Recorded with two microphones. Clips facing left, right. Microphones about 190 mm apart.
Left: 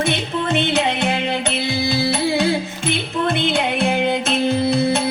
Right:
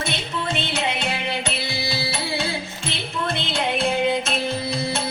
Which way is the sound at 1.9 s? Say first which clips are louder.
Left 10 dB; 50° left (ahead or behind).